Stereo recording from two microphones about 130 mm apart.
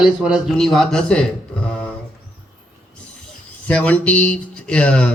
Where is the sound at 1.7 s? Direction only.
5° left (ahead or behind).